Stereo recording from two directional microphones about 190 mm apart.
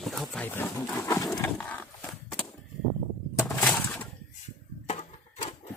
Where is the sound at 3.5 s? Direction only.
5° left (ahead or behind).